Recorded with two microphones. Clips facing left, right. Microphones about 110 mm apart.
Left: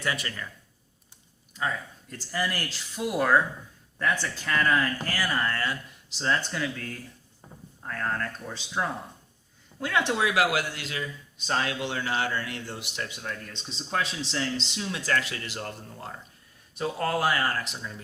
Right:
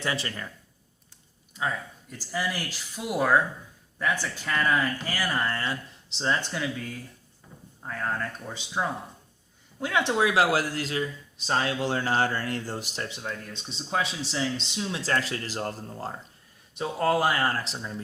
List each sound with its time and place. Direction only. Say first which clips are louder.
0.0 s speech: right 1 dB; 25° right (ahead or behind)
1.5 s speech: even; 5° right (ahead or behind)
5.5 s speech: even; 25° right (ahead or behind)
6.2 s speech: even; 10° right (ahead or behind)
9.8 s speech: right 1 dB; 20° right (ahead or behind)
13.5 s speech: right 1 dB; 5° right (ahead or behind)
14.9 s speech: even; 30° right (ahead or behind)
16.7 s speech: right 3 dB; 15° right (ahead or behind)
17.2 s speech: right 1 dB; 25° right (ahead or behind)